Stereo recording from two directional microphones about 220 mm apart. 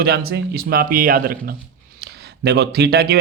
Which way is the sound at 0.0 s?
45° right (ahead or behind).